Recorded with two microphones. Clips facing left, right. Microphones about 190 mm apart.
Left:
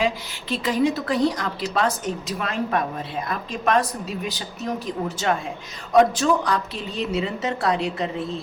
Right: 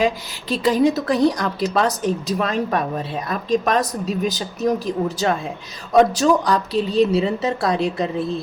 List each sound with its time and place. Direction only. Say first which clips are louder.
0.0 s a woman's voice: right 4 dB; 40° right (ahead or behind)